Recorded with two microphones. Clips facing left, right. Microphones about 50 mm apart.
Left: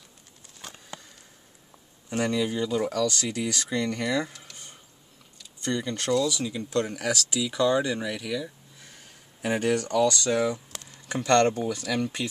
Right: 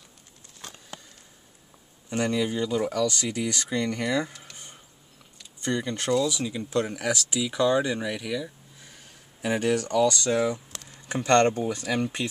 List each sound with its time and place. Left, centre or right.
2.0 s speech: centre
5.6 s speech: centre
9.8 s speech: centre
11.1 s speech: right